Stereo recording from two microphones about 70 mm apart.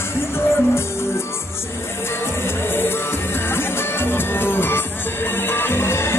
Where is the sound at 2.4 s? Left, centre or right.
Left.